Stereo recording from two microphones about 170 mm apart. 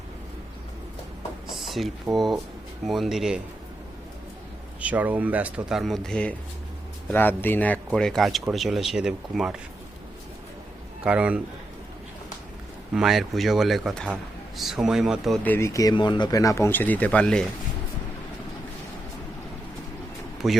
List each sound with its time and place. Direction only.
1.5 s a sound: centre (ahead or behind)
2.1 s speech: centre (ahead or behind)
4.8 s speech: 10° right (ahead or behind)
11.0 s speech: 5° right (ahead or behind)
12.9 s speech: centre (ahead or behind)
15.4 s speech: 15° left (ahead or behind)
20.4 s speech: centre (ahead or behind)